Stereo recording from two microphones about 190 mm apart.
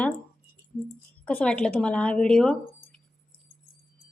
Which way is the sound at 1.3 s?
5° left (ahead or behind).